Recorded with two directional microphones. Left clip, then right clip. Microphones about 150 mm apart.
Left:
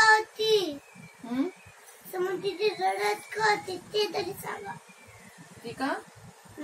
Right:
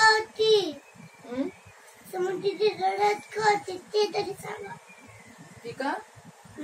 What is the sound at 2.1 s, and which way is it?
Child singing, 15° left (ahead or behind).